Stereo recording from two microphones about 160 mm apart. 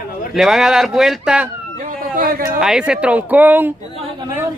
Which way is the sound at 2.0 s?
60° right (ahead or behind).